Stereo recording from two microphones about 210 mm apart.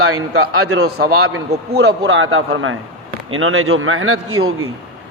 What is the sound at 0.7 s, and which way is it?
A man's voice, 50° right (ahead or behind).